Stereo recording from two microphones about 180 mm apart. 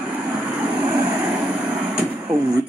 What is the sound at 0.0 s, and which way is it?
Vehicle, 10° right (ahead or behind).